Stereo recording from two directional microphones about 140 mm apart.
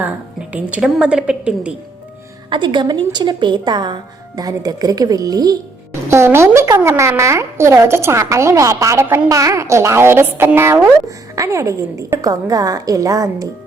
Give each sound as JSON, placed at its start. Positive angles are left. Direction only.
{"t": 0.5, "sound": "a woman's voice", "side_deg": -5}
{"t": 2.5, "sound": "a woman's voice", "side_deg": -35}